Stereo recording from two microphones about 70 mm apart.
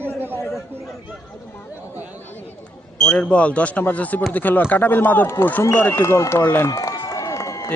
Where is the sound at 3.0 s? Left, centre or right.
Centre; by 6.6 s left.